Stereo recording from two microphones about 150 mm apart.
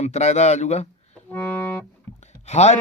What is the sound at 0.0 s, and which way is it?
Mantra, 50° left (ahead or behind).